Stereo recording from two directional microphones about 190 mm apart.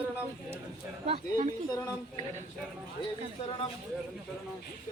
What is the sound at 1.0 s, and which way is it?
Speech, 30° right (ahead or behind).